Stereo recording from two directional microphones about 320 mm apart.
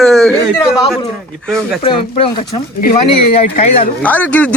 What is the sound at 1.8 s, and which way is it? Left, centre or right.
Speech, centre.